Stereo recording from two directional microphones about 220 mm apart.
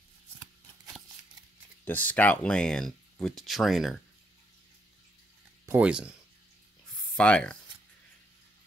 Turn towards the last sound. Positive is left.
turn(degrees=5)  # may be behind; listen again after turning